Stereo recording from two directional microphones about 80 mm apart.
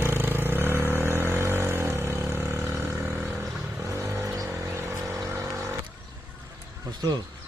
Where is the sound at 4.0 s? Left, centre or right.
Right.